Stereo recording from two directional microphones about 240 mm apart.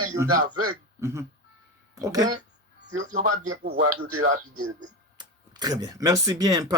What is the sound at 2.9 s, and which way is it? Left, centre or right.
Speech, right.